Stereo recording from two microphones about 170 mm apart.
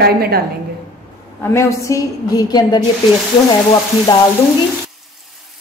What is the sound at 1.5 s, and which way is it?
A woman's voice, 20° left (ahead or behind).